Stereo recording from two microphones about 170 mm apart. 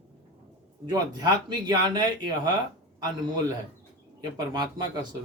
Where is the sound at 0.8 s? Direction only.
25° right (ahead or behind).